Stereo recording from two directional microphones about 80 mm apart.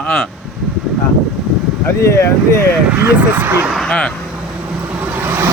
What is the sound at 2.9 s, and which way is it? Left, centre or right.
Speech, right.